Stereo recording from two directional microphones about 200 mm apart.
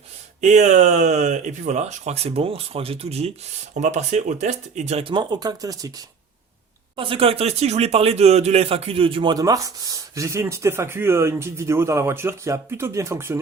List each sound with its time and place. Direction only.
0.4 s speech: 35° right (ahead or behind); by 13.4 s 10° right (ahead or behind)